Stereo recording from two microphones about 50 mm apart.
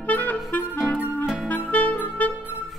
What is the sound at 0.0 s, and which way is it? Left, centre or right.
Clarinet, left.